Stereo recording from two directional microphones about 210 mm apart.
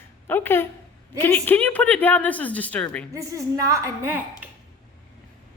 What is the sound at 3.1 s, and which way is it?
A woman's voice, 15° right (ahead or behind).